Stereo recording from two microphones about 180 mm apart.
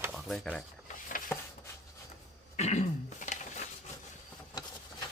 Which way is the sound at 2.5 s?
40° left (ahead or behind).